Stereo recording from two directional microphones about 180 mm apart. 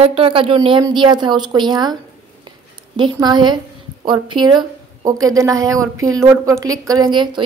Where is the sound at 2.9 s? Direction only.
25° right (ahead or behind).